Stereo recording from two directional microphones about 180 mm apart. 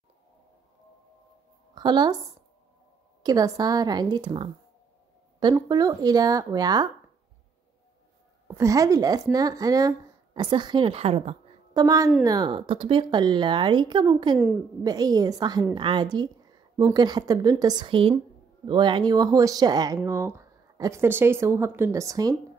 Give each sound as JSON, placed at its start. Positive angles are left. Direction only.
{"t": 1.8, "sound": "a woman's voice", "side_deg": -25}
{"t": 3.2, "sound": "a woman's voice", "side_deg": -20}
{"t": 8.5, "sound": "a woman's voice", "side_deg": -15}
{"t": 11.7, "sound": "a woman's voice", "side_deg": -20}